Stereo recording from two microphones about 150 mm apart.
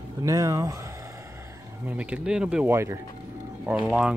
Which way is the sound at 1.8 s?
10° right (ahead or behind).